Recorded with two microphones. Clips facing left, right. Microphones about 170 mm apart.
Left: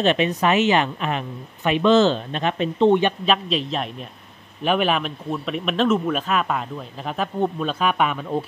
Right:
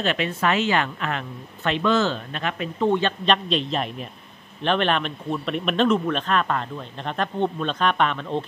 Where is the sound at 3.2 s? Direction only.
5° left (ahead or behind).